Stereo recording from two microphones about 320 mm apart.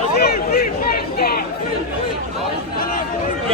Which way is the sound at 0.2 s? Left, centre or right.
Left.